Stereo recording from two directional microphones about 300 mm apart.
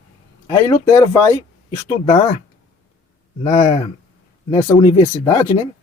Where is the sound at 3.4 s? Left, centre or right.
Left.